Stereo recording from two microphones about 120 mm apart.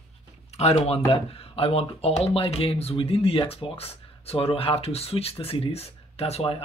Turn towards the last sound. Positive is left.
turn(degrees=55)  # may be behind; listen again after turning